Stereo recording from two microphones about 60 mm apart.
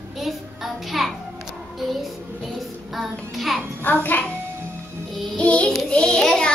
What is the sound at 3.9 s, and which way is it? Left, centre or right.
Speech, left.